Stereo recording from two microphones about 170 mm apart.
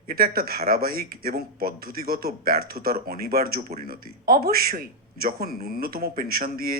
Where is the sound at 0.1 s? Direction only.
60° right (ahead or behind).